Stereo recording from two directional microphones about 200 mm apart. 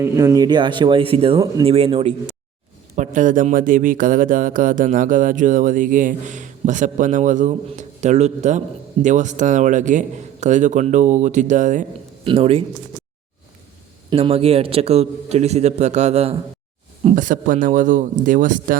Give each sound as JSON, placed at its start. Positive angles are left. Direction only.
{"t": 0.0, "sound": "speech", "side_deg": -15}
{"t": 12.2, "sound": "speech", "side_deg": -30}
{"t": 14.1, "sound": "speech", "side_deg": -30}